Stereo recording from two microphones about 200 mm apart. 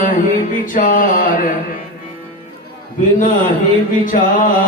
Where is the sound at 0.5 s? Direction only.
40° left (ahead or behind).